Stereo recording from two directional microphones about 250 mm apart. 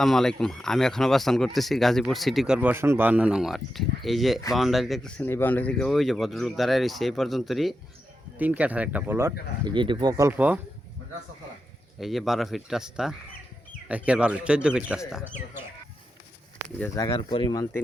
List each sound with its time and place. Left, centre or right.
0.0 s speech: centre
11.9 s speech: centre
16.8 s speech: centre